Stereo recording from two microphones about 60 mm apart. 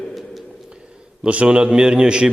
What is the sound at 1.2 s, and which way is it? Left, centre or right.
A man's voice, centre.